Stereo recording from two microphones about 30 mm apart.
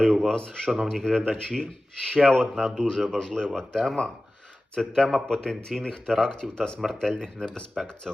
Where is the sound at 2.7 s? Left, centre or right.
Left.